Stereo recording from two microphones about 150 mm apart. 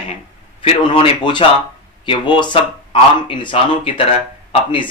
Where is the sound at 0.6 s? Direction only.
35° left (ahead or behind).